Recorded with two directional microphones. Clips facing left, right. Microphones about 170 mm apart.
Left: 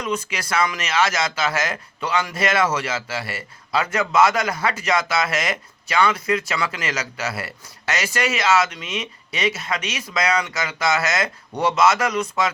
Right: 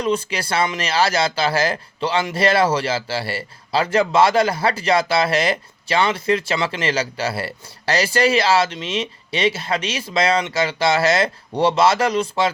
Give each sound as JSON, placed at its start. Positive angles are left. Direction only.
{"t": 0.0, "sound": "speech", "side_deg": -30}